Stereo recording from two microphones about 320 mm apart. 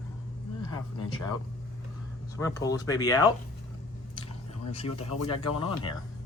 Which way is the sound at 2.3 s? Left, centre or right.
Centre.